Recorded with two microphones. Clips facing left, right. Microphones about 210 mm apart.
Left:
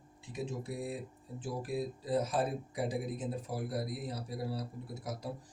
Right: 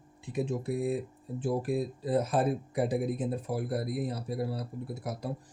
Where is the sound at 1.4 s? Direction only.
55° right (ahead or behind).